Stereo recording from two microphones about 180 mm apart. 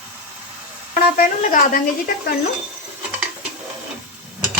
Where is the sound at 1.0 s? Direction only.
50° left (ahead or behind).